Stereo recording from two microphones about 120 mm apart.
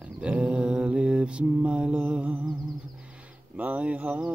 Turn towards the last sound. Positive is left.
turn(degrees=-10)  # may be behind; listen again after turning